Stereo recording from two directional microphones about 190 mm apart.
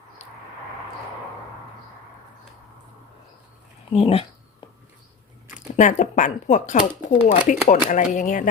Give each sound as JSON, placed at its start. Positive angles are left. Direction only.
{"t": 3.9, "sound": "speech", "side_deg": 30}
{"t": 5.5, "sound": "speech", "side_deg": 40}